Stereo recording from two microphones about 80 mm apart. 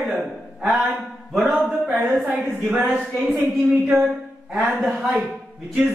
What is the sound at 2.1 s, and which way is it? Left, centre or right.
Speech, centre.